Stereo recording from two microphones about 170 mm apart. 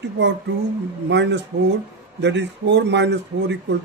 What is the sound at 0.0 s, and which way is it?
Speech, 90° right.